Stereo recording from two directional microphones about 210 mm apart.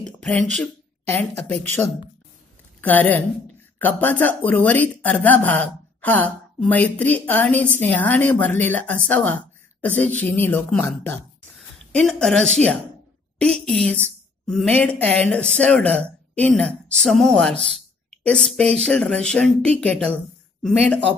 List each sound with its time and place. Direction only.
0.0 s speech: 5° left (ahead or behind)
2.8 s a woman's voice: 10° left (ahead or behind)